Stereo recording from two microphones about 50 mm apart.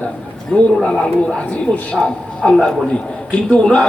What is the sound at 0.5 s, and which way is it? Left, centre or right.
Speech, centre.